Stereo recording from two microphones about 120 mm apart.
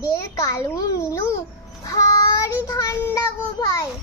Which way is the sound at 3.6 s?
30° left (ahead or behind).